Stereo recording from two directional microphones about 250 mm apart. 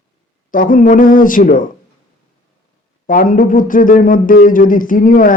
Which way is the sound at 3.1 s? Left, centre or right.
Left.